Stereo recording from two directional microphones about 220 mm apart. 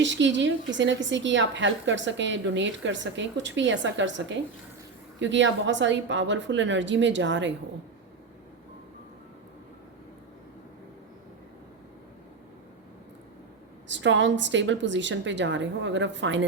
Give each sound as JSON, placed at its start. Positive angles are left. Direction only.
{"t": 0.0, "sound": "a woman's voice", "side_deg": -55}
{"t": 13.8, "sound": "a woman's voice", "side_deg": -55}